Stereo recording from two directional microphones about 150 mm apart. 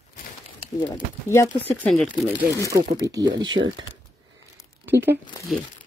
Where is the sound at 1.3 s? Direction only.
20° left (ahead or behind).